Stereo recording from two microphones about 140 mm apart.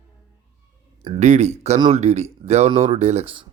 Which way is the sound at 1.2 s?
55° right (ahead or behind).